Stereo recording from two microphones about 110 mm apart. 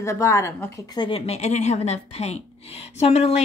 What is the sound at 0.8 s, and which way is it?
Speech, 40° left (ahead or behind).